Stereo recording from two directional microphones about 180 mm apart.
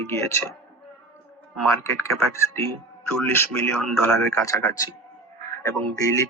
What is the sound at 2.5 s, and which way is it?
A man's voice, 15° left (ahead or behind).